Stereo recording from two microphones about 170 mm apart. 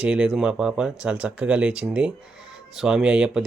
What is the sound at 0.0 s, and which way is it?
Speech, 5° right (ahead or behind).